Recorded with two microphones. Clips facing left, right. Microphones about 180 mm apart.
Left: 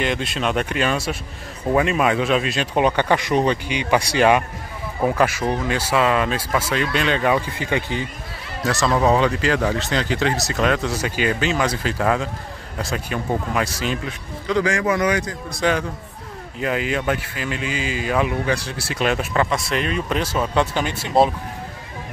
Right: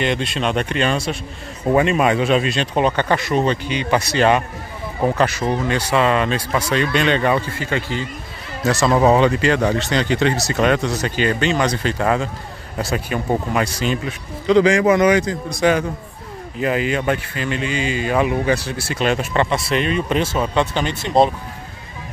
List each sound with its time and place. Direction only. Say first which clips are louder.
0.0 s speech: right 2 dB; 5° left (ahead or behind)
5.4 s speech: right 2 dB; 15° right (ahead or behind)
5.7 s speech: right 2 dB; 5° left (ahead or behind)
8.6 s speech: right 3 dB; 5° right (ahead or behind)
14.4 s a man's voice: right 7 dB; 20° right (ahead or behind)
16.5 s speech: right 3 dB; centre (ahead or behind)